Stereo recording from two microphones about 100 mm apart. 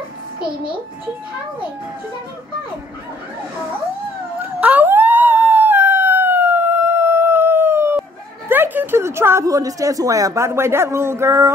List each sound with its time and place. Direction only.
4.4 s howl: 15° right (ahead or behind)
8.5 s speech: 20° right (ahead or behind)